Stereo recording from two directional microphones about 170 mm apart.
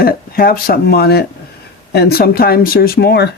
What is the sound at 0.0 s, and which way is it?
Speech, 60° left (ahead or behind).